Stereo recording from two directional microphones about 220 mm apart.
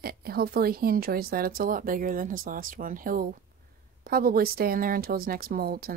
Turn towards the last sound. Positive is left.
turn(degrees=-45)  # may be behind; listen again after turning